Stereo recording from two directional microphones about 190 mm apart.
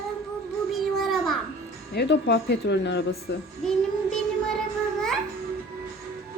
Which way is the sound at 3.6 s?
5° left (ahead or behind).